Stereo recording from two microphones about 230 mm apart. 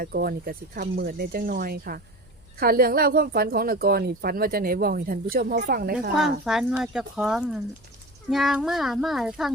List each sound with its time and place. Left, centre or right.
0.0 s speech: right
6.4 s speech: centre